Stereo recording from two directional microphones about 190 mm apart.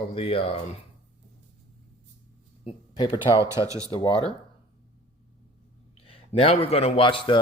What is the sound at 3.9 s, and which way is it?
Speech, 25° left (ahead or behind).